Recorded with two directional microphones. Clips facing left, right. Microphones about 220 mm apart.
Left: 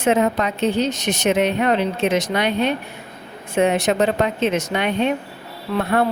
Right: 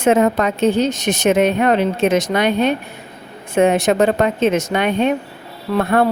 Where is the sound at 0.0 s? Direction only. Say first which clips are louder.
Right 4 dB; 50° right (ahead or behind).